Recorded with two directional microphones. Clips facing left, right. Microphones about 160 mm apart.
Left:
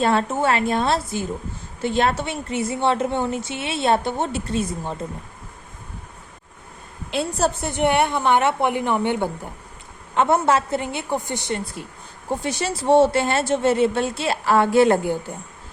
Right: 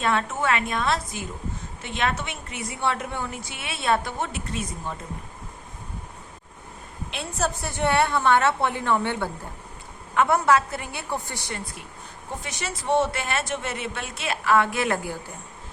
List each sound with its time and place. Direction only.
0.0 s a woman's voice: 35° left (ahead or behind)
7.1 s a woman's voice: 35° left (ahead or behind)